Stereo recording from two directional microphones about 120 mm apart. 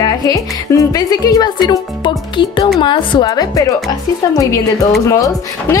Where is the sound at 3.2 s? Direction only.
30° left (ahead or behind).